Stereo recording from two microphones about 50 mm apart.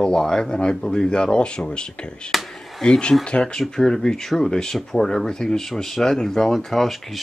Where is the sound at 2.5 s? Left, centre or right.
Centre.